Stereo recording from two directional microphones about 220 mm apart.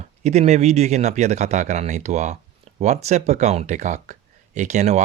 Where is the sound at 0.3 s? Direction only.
30° right (ahead or behind).